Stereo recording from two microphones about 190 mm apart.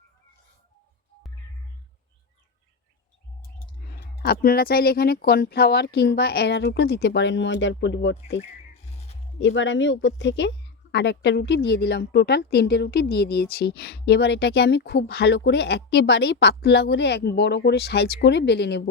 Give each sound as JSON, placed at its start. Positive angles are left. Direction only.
{"t": 4.2, "sound": "a woman's voice", "side_deg": 55}
{"t": 9.4, "sound": "a woman's voice", "side_deg": 75}